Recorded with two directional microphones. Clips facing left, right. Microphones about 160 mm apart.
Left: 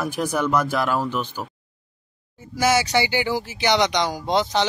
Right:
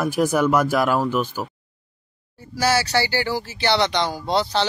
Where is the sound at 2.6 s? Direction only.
20° left (ahead or behind).